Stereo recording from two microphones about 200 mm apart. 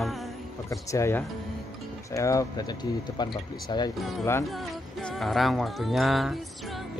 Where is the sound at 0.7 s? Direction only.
15° left (ahead or behind).